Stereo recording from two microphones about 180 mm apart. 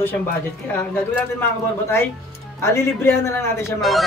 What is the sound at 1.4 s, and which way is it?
Speech, 15° left (ahead or behind).